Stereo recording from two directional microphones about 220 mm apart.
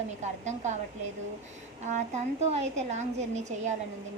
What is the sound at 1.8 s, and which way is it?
A woman's voice, 30° right (ahead or behind).